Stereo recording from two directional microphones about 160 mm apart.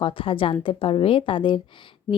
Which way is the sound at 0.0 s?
35° left (ahead or behind).